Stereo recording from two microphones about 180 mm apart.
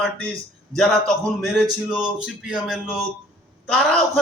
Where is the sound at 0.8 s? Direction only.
Centre (ahead or behind).